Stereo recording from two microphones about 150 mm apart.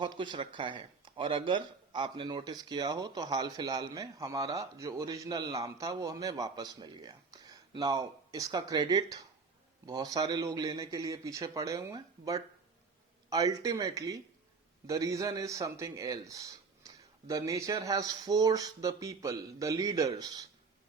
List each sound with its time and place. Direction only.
0.0 s speech: 30° right (ahead or behind)